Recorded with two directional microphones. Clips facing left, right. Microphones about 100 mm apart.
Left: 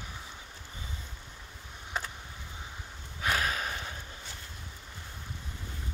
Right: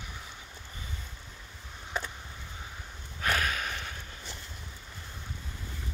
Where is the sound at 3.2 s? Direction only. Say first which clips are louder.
Even; 15° left (ahead or behind).